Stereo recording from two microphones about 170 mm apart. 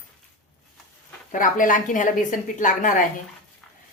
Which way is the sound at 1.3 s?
50° left (ahead or behind).